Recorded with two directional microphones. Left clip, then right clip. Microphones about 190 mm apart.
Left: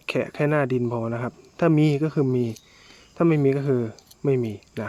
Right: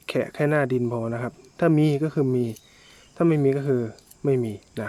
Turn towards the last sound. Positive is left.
turn(degrees=5)  # may be behind; listen again after turning